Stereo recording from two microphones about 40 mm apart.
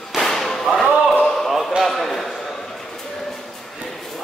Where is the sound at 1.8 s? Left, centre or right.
Centre.